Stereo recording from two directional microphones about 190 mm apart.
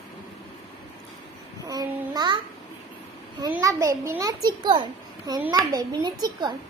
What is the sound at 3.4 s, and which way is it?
A child's voice, 20° right (ahead or behind).